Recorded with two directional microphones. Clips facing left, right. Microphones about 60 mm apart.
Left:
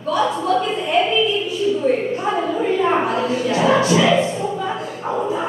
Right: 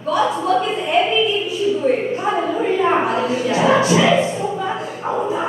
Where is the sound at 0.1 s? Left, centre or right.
Right.